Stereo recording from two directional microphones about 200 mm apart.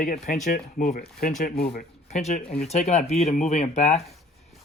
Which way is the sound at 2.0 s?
35° left (ahead or behind).